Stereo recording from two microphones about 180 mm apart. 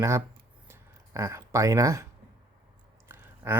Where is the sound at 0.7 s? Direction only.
15° right (ahead or behind).